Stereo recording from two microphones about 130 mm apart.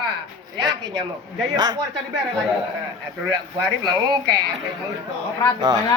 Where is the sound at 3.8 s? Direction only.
30° right (ahead or behind).